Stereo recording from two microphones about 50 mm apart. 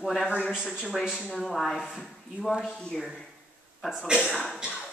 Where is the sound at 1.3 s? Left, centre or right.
Centre.